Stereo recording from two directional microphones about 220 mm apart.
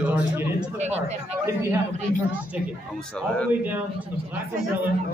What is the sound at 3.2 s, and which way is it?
Speech, 5° left (ahead or behind).